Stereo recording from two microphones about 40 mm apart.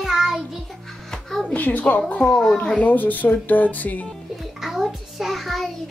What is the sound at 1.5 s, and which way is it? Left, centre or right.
Speech, left.